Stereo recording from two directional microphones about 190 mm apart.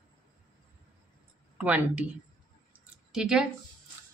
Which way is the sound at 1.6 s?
5° right (ahead or behind).